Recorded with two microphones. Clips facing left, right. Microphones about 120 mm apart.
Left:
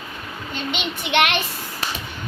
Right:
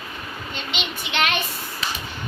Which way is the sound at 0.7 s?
65° left (ahead or behind).